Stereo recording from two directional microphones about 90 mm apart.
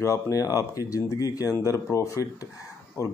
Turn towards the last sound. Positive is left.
turn(degrees=40)  # may be behind; listen again after turning